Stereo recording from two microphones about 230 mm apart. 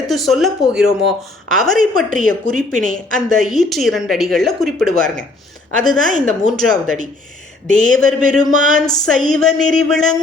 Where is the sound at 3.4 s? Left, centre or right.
Centre.